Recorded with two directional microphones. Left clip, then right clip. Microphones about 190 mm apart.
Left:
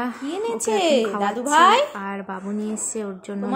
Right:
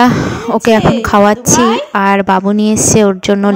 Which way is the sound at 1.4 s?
5° left (ahead or behind).